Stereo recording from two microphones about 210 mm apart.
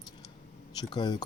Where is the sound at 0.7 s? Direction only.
20° left (ahead or behind).